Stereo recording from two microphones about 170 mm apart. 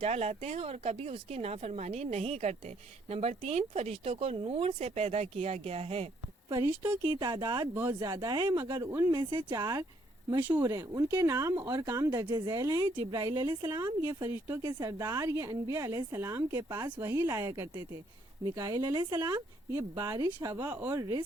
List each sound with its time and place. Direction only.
0.0 s speech: 40° right (ahead or behind)
6.7 s a woman's voice: 15° right (ahead or behind)
7.2 s speech: 25° right (ahead or behind)
7.7 s a woman's voice: 15° right (ahead or behind)
8.0 s a woman's voice: 25° right (ahead or behind)
20.7 s a woman's voice: 10° right (ahead or behind)